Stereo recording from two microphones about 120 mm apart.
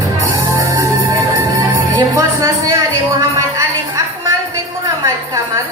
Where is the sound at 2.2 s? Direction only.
25° right (ahead or behind).